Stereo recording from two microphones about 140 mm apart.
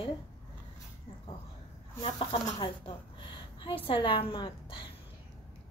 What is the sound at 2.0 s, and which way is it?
Speech, 40° left (ahead or behind).